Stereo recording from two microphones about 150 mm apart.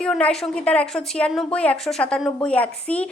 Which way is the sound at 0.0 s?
5° left (ahead or behind).